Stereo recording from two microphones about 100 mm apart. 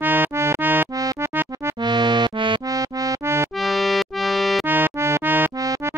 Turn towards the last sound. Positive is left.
turn(degrees=-20)  # may be behind; listen again after turning